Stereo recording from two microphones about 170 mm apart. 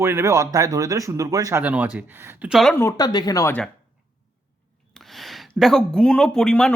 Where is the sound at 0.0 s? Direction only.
15° right (ahead or behind).